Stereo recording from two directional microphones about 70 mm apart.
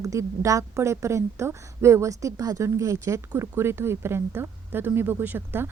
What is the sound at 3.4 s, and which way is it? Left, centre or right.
Speech, right.